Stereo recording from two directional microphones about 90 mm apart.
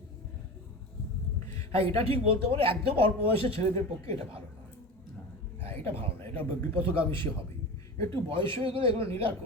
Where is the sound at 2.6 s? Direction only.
90° right.